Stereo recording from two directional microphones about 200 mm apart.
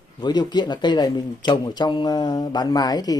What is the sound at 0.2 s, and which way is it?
Speech, 20° left (ahead or behind).